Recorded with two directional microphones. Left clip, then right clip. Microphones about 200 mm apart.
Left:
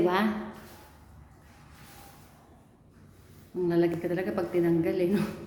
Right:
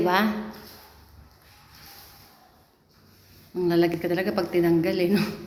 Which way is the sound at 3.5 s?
20° right (ahead or behind).